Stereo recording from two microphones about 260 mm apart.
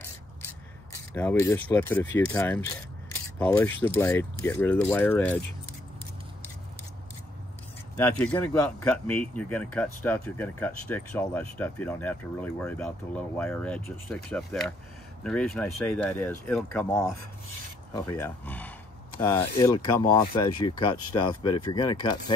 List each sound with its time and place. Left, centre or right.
1.1 s speech: centre
8.0 s speech: centre